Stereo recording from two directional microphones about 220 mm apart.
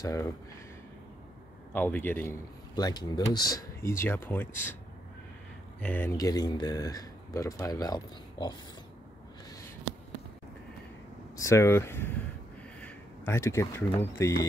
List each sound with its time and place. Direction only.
0.0 s a man's voice: 15° left (ahead or behind)
1.7 s a man's voice: 10° left (ahead or behind)
5.8 s a man's voice: 10° left (ahead or behind)
11.3 s a man's voice: 15° left (ahead or behind)
12.8 s a sound: 10° left (ahead or behind)
14.2 s a man's voice: 15° left (ahead or behind)